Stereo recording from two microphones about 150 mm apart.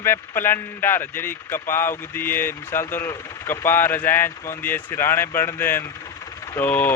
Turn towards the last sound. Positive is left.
turn(degrees=10)  # may be behind; listen again after turning